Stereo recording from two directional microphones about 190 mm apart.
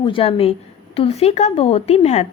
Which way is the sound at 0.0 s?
30° left (ahead or behind).